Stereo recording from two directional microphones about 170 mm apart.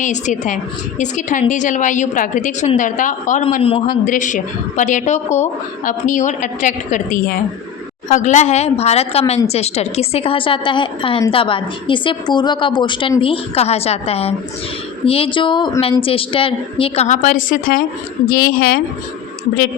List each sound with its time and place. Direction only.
0.0 s a woman's voice: 45° left (ahead or behind)
3.6 s a woman's voice: 35° left (ahead or behind)
3.8 s a woman's voice: 50° left (ahead or behind)